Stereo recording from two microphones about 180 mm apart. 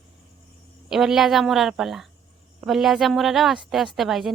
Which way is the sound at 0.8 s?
Centre (ahead or behind).